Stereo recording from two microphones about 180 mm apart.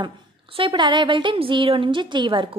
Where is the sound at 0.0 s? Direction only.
30° right (ahead or behind).